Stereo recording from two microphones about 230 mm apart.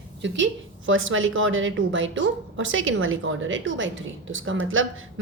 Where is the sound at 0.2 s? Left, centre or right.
Right.